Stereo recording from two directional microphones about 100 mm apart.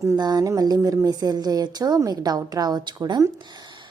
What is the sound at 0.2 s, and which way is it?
A woman's voice, 40° right (ahead or behind).